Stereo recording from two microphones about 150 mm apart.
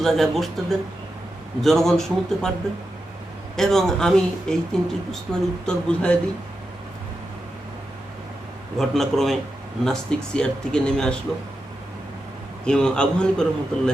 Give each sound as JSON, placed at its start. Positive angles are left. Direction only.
{"t": 0.0, "sound": "speech", "side_deg": 0}
{"t": 3.5, "sound": "speech", "side_deg": 0}
{"t": 8.8, "sound": "speech", "side_deg": 0}
{"t": 12.6, "sound": "speech", "side_deg": 5}